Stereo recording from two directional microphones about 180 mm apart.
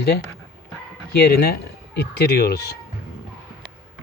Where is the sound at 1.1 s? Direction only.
60° left (ahead or behind).